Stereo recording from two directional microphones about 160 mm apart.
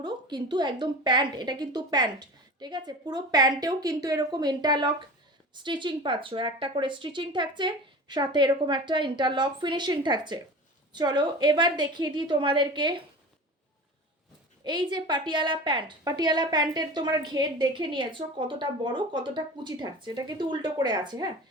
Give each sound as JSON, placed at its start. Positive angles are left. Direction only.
{"t": 0.0, "sound": "a woman's voice", "side_deg": -25}
{"t": 14.6, "sound": "a woman's voice", "side_deg": -30}